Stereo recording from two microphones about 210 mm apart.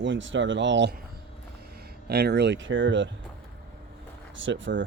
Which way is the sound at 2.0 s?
50° right (ahead or behind).